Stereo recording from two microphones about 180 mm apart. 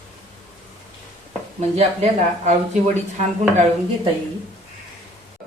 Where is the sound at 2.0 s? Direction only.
40° right (ahead or behind).